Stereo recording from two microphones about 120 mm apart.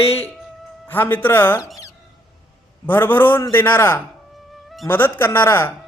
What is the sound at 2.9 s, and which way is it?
A man's voice, 15° left (ahead or behind).